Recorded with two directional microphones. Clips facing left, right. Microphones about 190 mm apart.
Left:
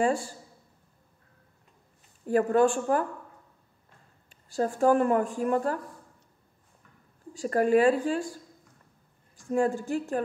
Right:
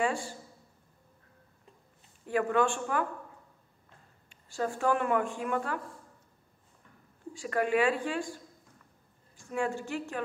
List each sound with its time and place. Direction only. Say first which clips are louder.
0.0 s speech: left 5 dB; 40° left (ahead or behind)
2.2 s speech: left 5 dB; 40° left (ahead or behind)
4.3 s speech: left 5 dB; 40° left (ahead or behind)
7.3 s speech: left 6 dB; 40° left (ahead or behind)
9.5 s speech: left 6 dB; 40° left (ahead or behind)